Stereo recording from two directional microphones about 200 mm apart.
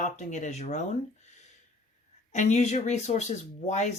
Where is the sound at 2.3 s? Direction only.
35° left (ahead or behind).